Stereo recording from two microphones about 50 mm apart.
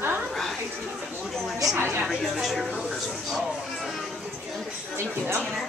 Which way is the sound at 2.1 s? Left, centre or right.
Centre.